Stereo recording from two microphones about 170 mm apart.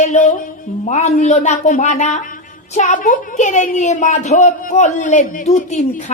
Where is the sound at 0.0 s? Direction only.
45° left (ahead or behind).